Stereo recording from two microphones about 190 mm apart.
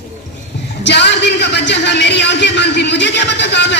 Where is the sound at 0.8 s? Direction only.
65° left (ahead or behind).